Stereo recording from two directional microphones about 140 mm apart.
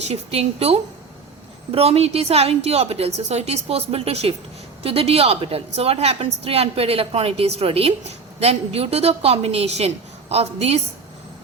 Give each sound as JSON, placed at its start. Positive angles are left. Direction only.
{"t": 0.0, "sound": "a woman's voice", "side_deg": -45}